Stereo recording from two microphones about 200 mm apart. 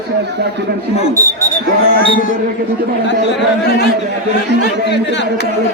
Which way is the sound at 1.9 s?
45° left (ahead or behind).